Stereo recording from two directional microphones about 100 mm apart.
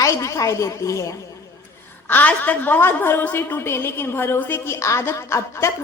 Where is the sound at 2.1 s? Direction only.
20° left (ahead or behind).